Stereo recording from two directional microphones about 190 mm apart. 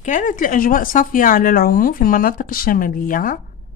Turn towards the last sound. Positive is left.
turn(degrees=45)  # may be behind; listen again after turning